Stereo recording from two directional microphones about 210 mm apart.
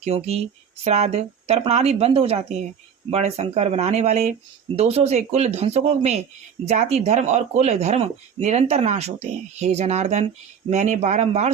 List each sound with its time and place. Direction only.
0.0 s speech: 30° right (ahead or behind)